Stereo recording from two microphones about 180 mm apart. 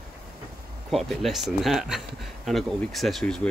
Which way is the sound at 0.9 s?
Centre (ahead or behind).